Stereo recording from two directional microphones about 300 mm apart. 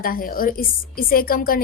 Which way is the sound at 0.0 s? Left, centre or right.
Left.